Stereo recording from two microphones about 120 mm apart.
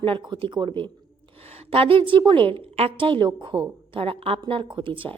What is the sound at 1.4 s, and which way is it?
A woman's voice, 55° right (ahead or behind).